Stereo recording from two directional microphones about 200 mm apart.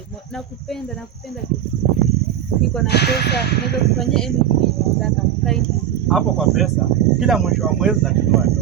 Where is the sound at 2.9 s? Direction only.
55° left (ahead or behind).